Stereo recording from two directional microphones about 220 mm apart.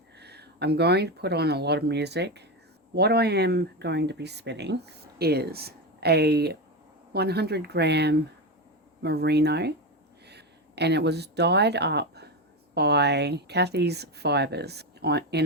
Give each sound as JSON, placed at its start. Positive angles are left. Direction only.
{"t": 0.2, "sound": "speech", "side_deg": -50}